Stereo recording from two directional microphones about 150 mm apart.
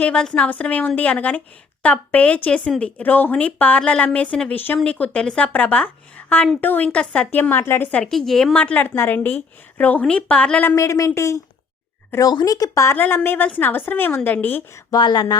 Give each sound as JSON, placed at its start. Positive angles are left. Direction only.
{"t": 0.0, "sound": "speech", "side_deg": 5}
{"t": 14.8, "sound": "speech", "side_deg": 30}